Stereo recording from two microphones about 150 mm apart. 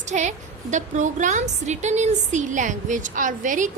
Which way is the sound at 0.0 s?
50° right (ahead or behind).